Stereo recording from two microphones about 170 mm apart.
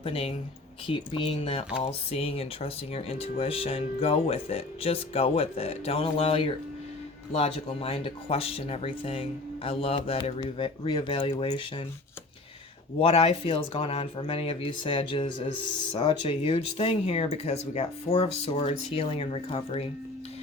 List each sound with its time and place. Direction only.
0.0 s speech: 30° left (ahead or behind)
13.0 s speech: 35° left (ahead or behind)